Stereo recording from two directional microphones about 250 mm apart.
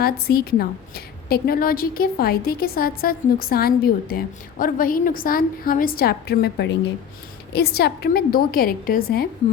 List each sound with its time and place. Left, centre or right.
0.0 s a woman's voice: left